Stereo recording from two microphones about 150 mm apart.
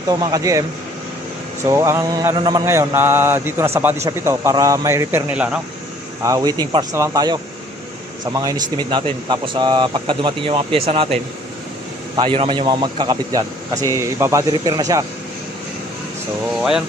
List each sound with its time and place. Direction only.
0.1 s speech: 25° right (ahead or behind)
1.6 s mantra: 20° right (ahead or behind)
3.8 s speech: 15° right (ahead or behind)
6.2 s speech: 25° right (ahead or behind)
13.8 s speech: 20° right (ahead or behind)